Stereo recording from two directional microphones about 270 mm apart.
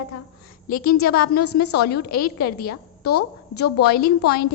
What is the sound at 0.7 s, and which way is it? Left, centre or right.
A woman's voice, left.